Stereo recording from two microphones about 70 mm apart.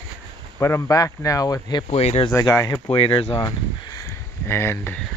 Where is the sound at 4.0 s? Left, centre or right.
Left.